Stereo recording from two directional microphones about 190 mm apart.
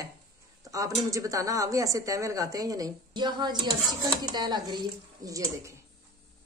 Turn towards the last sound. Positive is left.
turn(degrees=-15)  # may be behind; listen again after turning